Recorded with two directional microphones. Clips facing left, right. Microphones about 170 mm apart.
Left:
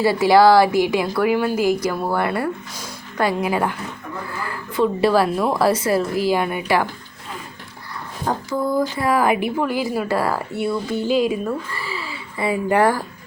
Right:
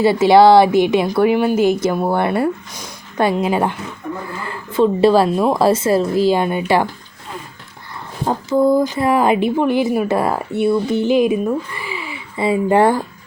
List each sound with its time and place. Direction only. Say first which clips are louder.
0.0 s a woman's voice: right 3 dB; 25° right (ahead or behind)
8.2 s a woman's voice: right 7 dB; 25° right (ahead or behind)